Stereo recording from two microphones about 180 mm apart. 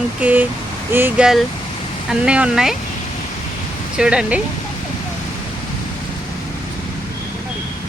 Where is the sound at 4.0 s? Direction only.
5° right (ahead or behind).